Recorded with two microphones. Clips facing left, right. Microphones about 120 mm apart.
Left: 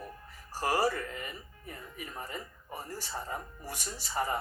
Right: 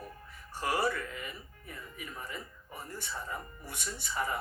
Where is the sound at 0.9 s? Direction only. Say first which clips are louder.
Left 1 dB; 35° left (ahead or behind).